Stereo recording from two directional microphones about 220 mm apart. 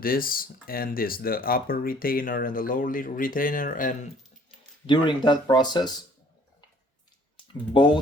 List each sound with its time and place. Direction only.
0.0 s speech: 40° left (ahead or behind)
4.9 s speech: 20° left (ahead or behind)
7.7 s speech: 20° left (ahead or behind)